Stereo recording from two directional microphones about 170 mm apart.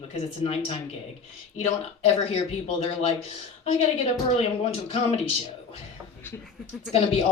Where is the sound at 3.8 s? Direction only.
35° left (ahead or behind).